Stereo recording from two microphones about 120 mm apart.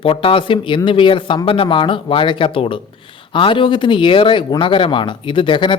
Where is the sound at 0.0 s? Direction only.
50° left (ahead or behind).